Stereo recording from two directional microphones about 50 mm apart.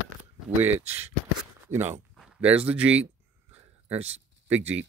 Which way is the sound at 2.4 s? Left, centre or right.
Right.